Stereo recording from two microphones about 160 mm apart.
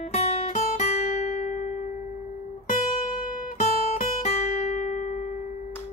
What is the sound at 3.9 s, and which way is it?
Guitar, 45° left (ahead or behind).